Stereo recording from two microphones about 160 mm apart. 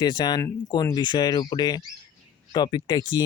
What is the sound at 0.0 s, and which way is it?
Speech, 25° left (ahead or behind).